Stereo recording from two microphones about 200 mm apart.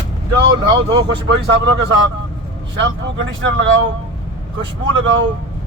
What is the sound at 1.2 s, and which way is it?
Speech, 60° right (ahead or behind).